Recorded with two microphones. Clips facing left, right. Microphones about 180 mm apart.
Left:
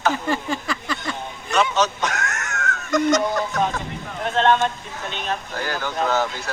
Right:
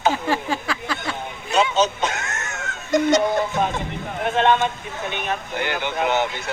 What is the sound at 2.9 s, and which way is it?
Chicken, 25° right (ahead or behind).